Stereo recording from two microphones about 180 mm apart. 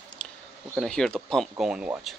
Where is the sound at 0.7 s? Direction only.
5° left (ahead or behind).